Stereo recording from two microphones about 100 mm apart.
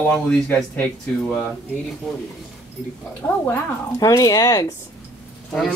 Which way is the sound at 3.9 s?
35° left (ahead or behind).